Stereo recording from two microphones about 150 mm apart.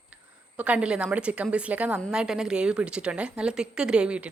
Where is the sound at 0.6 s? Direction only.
10° right (ahead or behind).